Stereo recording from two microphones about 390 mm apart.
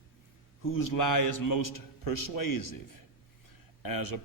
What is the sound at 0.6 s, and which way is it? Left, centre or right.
A man's voice, left.